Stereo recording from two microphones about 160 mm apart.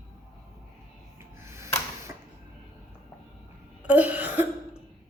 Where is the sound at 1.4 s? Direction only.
15° right (ahead or behind).